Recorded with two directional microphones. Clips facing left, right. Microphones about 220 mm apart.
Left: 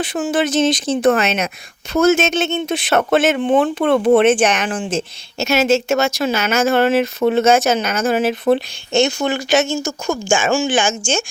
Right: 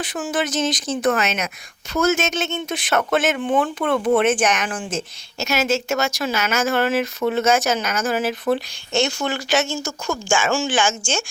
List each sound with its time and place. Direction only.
0.0 s speech: 25° left (ahead or behind)